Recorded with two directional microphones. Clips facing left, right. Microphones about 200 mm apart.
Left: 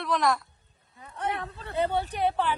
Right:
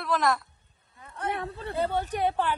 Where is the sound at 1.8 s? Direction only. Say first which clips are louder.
Left 1 dB; 15° left (ahead or behind).